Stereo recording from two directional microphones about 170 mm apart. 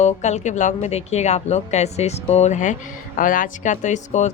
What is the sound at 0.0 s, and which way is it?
Speech, 45° left (ahead or behind).